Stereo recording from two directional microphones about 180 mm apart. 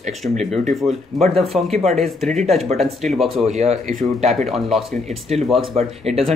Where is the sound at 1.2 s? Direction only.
35° right (ahead or behind).